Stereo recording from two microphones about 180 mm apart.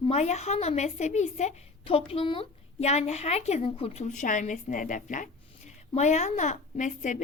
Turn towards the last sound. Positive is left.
turn(degrees=45)  # may be behind; listen again after turning